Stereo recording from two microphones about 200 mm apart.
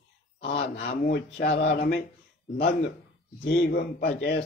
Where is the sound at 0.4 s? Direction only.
55° left (ahead or behind).